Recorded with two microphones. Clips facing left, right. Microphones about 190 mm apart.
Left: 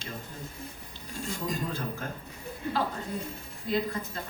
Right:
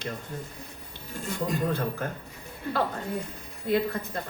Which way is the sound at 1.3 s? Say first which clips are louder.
Right 6 dB; 60° right (ahead or behind).